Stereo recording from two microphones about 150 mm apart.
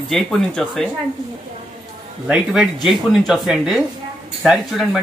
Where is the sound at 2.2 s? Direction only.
5° right (ahead or behind).